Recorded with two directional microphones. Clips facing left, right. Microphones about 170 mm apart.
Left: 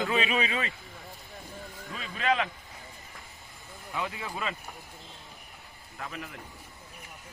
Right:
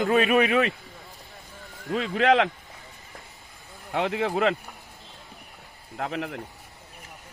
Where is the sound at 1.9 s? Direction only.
80° right.